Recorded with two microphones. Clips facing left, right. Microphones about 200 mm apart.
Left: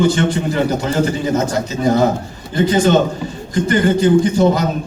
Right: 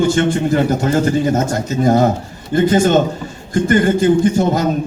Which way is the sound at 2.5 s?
45° right (ahead or behind).